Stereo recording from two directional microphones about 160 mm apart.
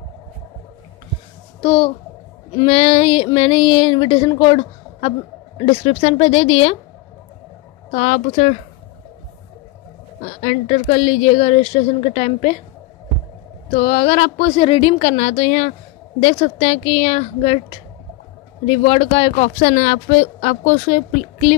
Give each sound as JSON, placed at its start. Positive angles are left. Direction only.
{"t": 1.6, "sound": "a woman's voice", "side_deg": 30}
{"t": 7.9, "sound": "speech", "side_deg": 45}
{"t": 10.2, "sound": "speech", "side_deg": 45}
{"t": 13.7, "sound": "a woman's voice", "side_deg": 40}